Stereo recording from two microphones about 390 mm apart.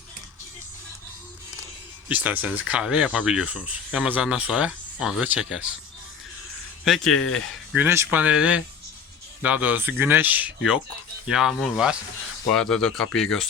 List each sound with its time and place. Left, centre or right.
2.0 s speech: centre
6.8 s speech: centre
7.1 s speech: left
7.7 s speech: centre